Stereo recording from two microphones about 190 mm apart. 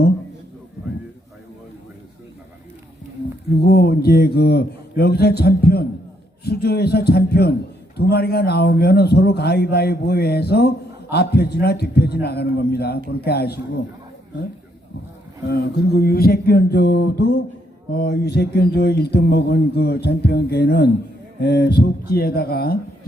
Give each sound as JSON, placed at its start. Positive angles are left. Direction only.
{"t": 3.6, "sound": "speech", "side_deg": 55}
{"t": 15.4, "sound": "speech", "side_deg": 55}